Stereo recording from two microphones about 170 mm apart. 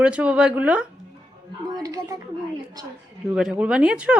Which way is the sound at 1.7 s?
20° right (ahead or behind).